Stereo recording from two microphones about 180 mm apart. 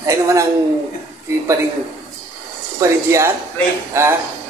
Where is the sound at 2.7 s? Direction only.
15° right (ahead or behind).